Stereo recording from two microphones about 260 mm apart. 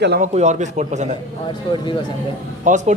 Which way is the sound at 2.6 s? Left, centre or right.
Right.